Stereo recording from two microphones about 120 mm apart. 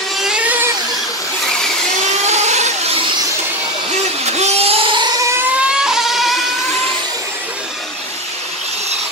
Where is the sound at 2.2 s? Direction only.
70° right (ahead or behind).